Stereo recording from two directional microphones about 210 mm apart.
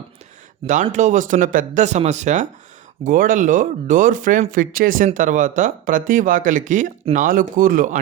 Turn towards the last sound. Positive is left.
turn(degrees=-40)  # may be behind; listen again after turning